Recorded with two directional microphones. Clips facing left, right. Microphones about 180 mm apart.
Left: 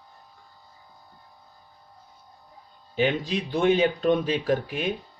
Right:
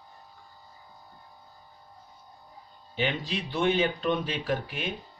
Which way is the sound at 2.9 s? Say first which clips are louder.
Left 6 dB; 50° left (ahead or behind).